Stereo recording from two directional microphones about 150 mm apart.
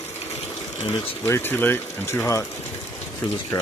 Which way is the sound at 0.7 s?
25° left (ahead or behind).